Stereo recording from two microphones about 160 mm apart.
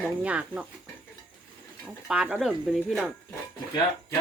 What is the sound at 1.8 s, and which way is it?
Speech, 5° right (ahead or behind).